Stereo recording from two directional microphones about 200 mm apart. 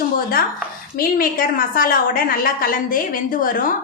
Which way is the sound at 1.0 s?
45° left (ahead or behind).